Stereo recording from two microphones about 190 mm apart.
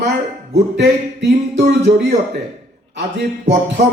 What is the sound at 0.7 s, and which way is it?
Speech, 65° right (ahead or behind).